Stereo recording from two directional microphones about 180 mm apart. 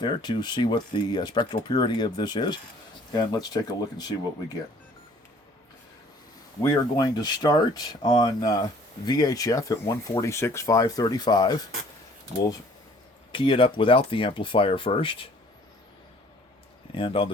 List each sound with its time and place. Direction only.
0.0 s speech: 25° left (ahead or behind)
6.6 s speech: 20° left (ahead or behind)
13.3 s speech: 30° left (ahead or behind)
16.9 s speech: 30° left (ahead or behind)